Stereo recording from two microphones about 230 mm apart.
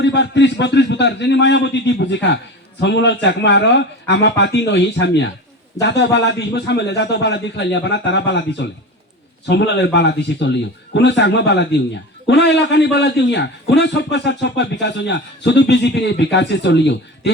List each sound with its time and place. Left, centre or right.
0.0 s a man's voice: left